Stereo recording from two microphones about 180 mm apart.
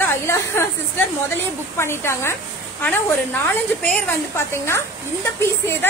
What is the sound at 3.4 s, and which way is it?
A woman's voice, 5° left (ahead or behind).